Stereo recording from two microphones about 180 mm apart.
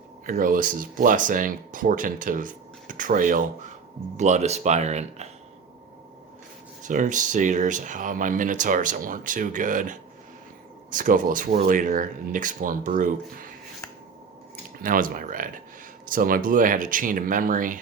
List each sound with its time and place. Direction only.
0.3 s speech: 50° right (ahead or behind)
6.8 s speech: 45° right (ahead or behind)
14.8 s speech: 50° right (ahead or behind)